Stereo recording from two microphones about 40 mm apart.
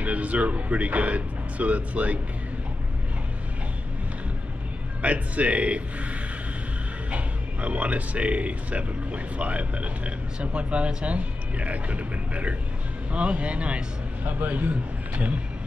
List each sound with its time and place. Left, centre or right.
0.0 s speech: right
5.0 s speech: right
7.1 s speech: right
14.2 s a man's voice: right